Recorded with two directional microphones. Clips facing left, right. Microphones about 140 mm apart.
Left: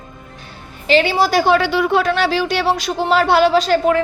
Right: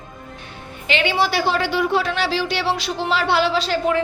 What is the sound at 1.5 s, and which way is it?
Speech, 70° left (ahead or behind).